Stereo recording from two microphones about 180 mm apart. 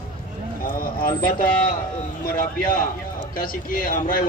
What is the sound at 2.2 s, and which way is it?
A man's voice, 55° left (ahead or behind).